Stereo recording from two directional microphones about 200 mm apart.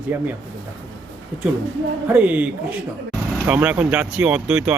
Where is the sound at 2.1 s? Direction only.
5° right (ahead or behind).